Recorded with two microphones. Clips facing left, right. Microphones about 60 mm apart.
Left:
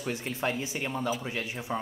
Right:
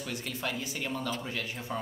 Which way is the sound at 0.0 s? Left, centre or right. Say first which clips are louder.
Left 4 dB; left.